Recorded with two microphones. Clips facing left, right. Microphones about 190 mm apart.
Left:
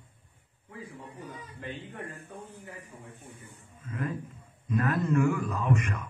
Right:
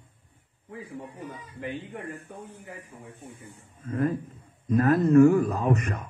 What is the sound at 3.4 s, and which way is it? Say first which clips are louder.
A man's voice: right 5 dB; 40° right (ahead or behind).